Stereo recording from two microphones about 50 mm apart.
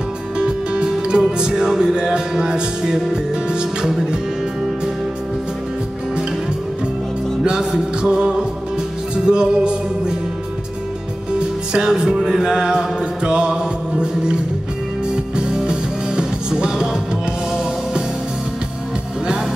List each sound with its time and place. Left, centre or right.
0.4 s music: centre
7.4 s music: centre
11.3 s music: centre